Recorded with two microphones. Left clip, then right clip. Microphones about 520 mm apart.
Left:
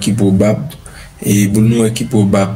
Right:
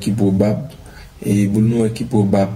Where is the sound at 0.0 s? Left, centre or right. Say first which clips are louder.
Left 4 dB; right.